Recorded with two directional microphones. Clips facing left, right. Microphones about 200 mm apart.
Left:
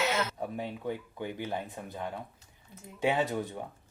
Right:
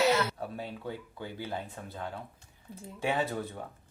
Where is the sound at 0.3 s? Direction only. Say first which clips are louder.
Left 2 dB; 15° left (ahead or behind).